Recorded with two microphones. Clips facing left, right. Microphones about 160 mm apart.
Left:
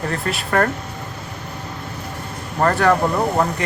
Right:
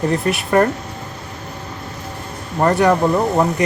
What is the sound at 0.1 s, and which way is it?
Speech, 15° right (ahead or behind).